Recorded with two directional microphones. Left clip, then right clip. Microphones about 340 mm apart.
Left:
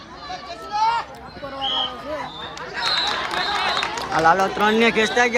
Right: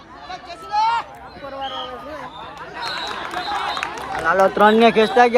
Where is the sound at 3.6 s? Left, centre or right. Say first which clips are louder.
Left 2 dB; centre.